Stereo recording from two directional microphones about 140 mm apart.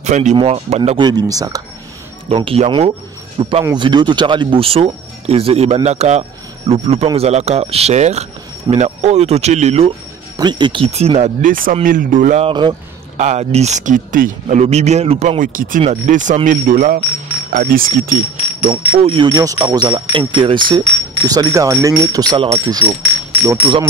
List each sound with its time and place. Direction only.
0.0 s speech: 55° right (ahead or behind)
0.9 s speech: 30° right (ahead or behind)
2.3 s speech: 40° right (ahead or behind)
10.3 s speech: 30° right (ahead or behind)
10.9 s speech: 50° right (ahead or behind)
11.4 s speech: 80° right
12.4 s speech: 35° right (ahead or behind)
13.2 s speech: 55° right (ahead or behind)
15.4 s speech: 75° right (ahead or behind)
15.8 s speech: 55° right (ahead or behind)
16.4 s speech: 80° right
18.7 s speech: 40° right (ahead or behind)